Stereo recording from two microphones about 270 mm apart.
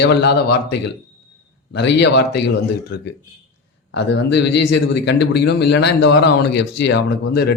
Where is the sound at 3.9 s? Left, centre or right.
Left.